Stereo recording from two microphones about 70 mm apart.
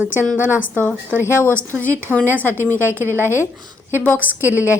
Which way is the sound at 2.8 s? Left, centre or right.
Right.